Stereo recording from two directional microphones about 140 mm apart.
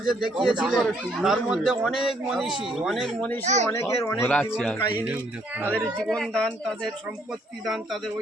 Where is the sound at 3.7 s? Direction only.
20° left (ahead or behind).